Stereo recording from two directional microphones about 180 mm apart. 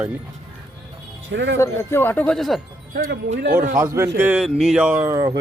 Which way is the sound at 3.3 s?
65° right (ahead or behind).